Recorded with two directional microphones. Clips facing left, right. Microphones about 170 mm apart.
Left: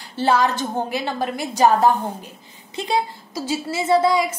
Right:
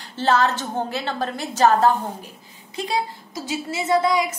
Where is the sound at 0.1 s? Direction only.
10° left (ahead or behind).